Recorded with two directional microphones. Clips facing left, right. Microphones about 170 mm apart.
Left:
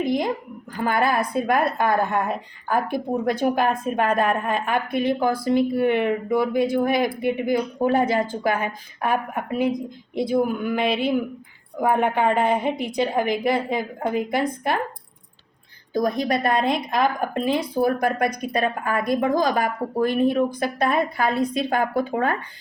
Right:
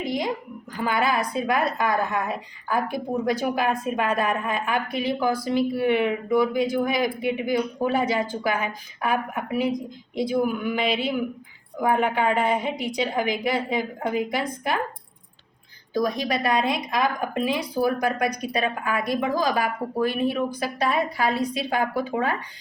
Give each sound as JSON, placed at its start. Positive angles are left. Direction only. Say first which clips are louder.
{"t": 0.0, "sound": "a woman's voice", "louder": "left 4 dB", "side_deg": 55}
{"t": 15.9, "sound": "speech", "louder": "left 2 dB", "side_deg": 50}